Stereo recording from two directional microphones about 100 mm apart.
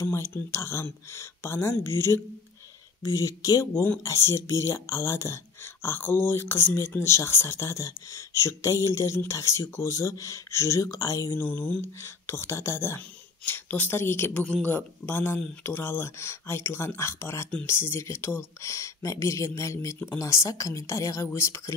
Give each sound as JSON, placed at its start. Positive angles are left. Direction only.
{"t": 0.0, "sound": "speech", "side_deg": 30}
{"t": 11.3, "sound": "speech", "side_deg": 20}